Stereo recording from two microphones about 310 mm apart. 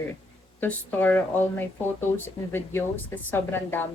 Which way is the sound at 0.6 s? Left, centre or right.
Centre.